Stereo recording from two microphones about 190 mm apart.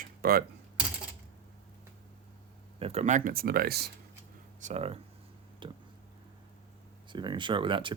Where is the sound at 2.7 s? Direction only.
30° right (ahead or behind); by 3.9 s 55° right (ahead or behind).